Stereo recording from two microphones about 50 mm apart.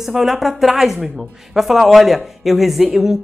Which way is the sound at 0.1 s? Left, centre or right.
Centre.